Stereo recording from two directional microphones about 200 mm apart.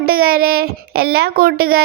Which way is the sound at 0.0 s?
50° right (ahead or behind).